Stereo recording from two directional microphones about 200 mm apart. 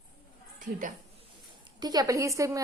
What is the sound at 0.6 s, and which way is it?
Speech, 40° right (ahead or behind).